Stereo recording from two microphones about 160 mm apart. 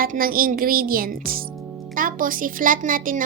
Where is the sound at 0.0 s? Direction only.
65° right (ahead or behind).